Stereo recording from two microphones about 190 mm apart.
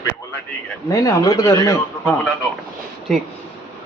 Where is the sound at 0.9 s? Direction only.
15° left (ahead or behind).